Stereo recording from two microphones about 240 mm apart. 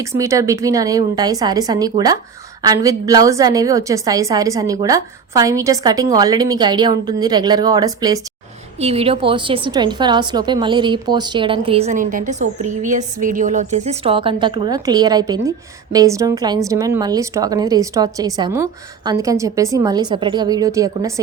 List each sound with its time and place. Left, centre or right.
0.0 s a woman's voice: centre